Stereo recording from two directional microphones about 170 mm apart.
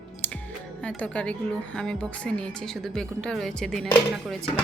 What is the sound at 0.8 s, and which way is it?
A woman's voice, 5° left (ahead or behind).